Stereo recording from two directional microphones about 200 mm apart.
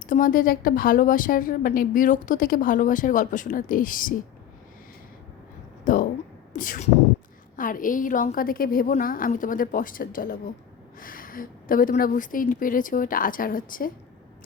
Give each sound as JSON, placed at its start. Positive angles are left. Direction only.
{"t": 0.0, "sound": "a woman's voice", "side_deg": 40}
{"t": 5.8, "sound": "a sound", "side_deg": 45}
{"t": 7.5, "sound": "a woman's voice", "side_deg": 45}